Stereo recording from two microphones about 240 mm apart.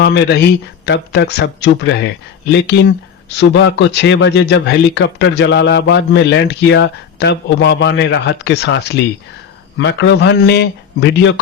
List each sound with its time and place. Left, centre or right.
0.0 s speech: left